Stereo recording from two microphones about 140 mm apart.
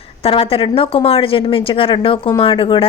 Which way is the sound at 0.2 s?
40° left (ahead or behind).